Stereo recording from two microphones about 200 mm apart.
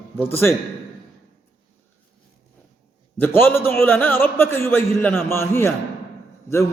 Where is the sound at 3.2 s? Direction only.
10° left (ahead or behind).